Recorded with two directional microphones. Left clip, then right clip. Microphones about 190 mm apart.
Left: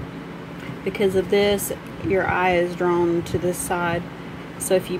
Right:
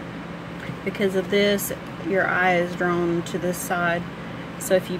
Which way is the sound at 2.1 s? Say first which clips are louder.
Even; 35° left (ahead or behind).